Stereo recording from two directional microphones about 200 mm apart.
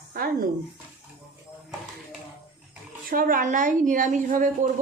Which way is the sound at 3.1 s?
45° right (ahead or behind).